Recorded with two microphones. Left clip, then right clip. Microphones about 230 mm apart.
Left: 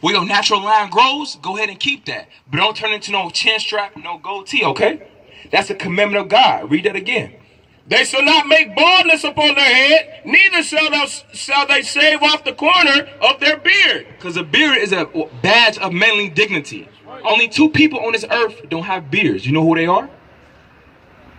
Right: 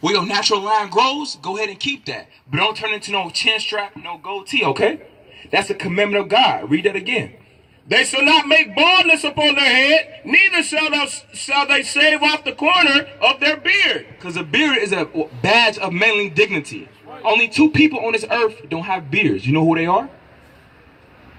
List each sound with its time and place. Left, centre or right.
0.0 s a man's voice: right